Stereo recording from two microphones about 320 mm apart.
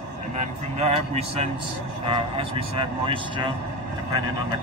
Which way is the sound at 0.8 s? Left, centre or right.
Centre.